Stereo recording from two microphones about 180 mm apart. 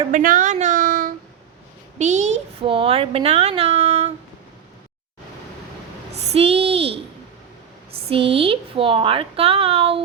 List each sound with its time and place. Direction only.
0.1 s speech: 45° right (ahead or behind)
0.5 s a sound: 45° right (ahead or behind)
2.0 s a child's voice: 40° right (ahead or behind)
6.1 s a child's voice: 35° right (ahead or behind)
8.0 s a child's voice: 30° right (ahead or behind)